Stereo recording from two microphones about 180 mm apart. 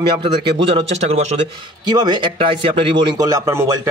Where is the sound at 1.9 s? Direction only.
25° right (ahead or behind).